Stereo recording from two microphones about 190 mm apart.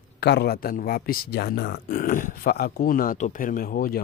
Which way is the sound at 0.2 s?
60° left (ahead or behind).